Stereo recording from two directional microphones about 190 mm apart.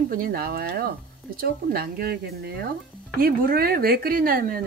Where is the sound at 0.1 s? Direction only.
55° right (ahead or behind).